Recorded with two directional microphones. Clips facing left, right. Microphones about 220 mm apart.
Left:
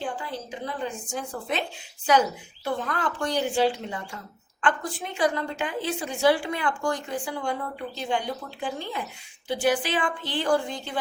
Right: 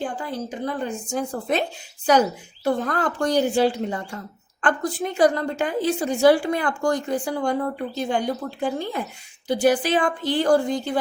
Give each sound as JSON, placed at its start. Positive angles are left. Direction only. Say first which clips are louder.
{"t": 0.0, "sound": "a woman's voice", "louder": "right 4 dB", "side_deg": -45}
{"t": 2.6, "sound": "a woman's voice", "louder": "right 6 dB", "side_deg": -45}